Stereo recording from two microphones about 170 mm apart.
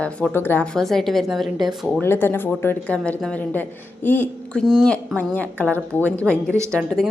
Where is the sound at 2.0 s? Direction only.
15° left (ahead or behind).